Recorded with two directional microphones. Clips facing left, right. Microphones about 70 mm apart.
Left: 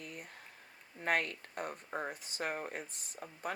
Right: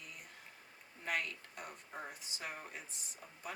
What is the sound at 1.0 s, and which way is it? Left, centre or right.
Speech, left.